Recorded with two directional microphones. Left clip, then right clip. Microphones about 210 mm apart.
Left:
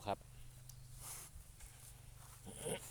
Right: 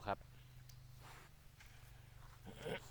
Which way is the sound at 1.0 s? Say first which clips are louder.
Left 4 dB; 55° left (ahead or behind).